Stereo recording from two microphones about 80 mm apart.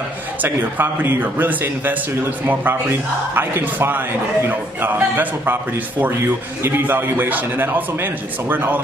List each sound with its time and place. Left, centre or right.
0.4 s a man's voice: right